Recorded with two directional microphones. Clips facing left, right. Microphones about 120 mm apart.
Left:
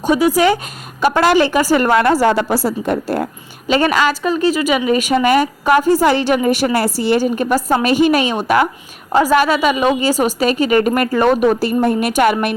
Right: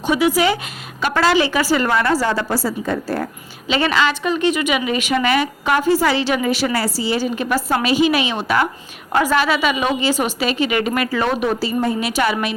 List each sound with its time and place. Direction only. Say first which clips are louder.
0.0 s a woman's voice: left 3 dB; 45° left (ahead or behind)
2.0 s a woman's voice: left 4 dB; 25° left (ahead or behind)
2.2 s a woman's voice: left 5 dB; 65° left (ahead or behind)
4.1 s a woman's voice: left 3 dB; 35° left (ahead or behind)
6.7 s a woman's voice: left 5 dB; 60° left (ahead or behind)